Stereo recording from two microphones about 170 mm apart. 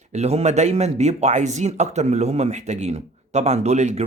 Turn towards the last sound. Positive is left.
turn(degrees=-40)  # may be behind; listen again after turning